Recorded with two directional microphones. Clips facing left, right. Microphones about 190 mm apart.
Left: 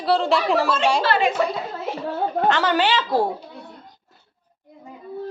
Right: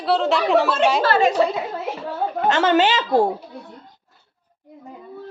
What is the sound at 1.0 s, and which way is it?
Speech, 40° right (ahead or behind).